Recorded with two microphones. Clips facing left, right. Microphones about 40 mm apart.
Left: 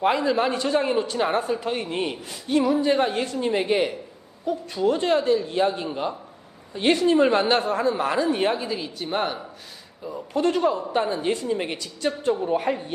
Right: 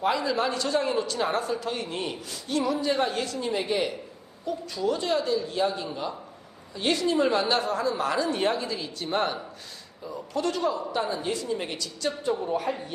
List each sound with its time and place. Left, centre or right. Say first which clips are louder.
0.0 s a man's voice: left 4 dB; left; by 9.4 s centre
10.3 s a man's voice: left 5 dB; left